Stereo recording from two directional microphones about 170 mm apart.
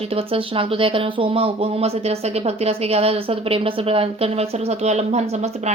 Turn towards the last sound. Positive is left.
turn(degrees=-40)  # may be behind; listen again after turning